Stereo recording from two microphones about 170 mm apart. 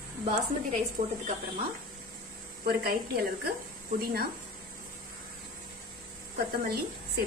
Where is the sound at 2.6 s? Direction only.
60° right (ahead or behind).